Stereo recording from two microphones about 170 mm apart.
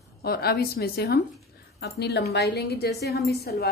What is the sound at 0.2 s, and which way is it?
A woman's voice, 65° left (ahead or behind).